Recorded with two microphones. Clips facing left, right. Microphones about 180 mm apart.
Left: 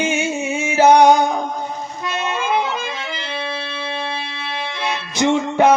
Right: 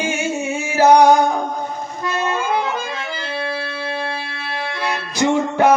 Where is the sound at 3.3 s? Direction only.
20° left (ahead or behind).